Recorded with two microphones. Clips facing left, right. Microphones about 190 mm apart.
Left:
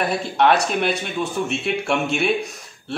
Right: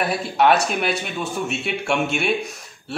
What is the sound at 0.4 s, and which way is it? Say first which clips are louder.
A man's voice: even; 5° right (ahead or behind).